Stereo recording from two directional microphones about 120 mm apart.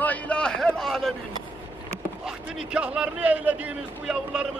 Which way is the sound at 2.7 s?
10° right (ahead or behind).